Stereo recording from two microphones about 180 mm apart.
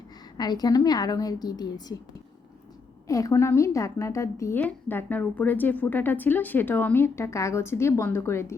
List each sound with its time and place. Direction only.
0.3 s a woman's voice: 20° left (ahead or behind)
3.1 s a woman's voice: 20° left (ahead or behind)